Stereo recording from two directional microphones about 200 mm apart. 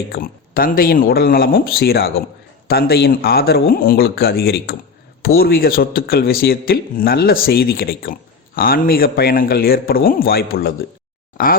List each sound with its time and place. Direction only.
0.1 s speech: 45° left (ahead or behind)